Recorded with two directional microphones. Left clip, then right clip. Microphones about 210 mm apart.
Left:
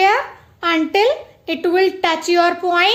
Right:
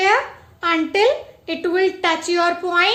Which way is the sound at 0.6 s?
35° left (ahead or behind).